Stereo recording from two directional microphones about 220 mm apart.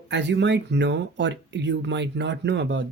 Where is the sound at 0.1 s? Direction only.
55° right (ahead or behind).